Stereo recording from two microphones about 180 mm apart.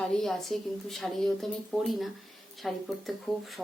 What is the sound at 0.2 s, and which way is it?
Speech, centre (ahead or behind).